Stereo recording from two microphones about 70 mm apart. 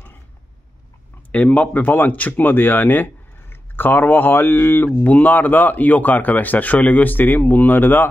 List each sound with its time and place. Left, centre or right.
1.3 s speech: left